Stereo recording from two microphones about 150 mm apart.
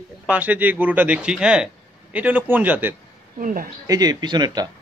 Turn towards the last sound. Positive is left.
turn(degrees=-25)  # may be behind; listen again after turning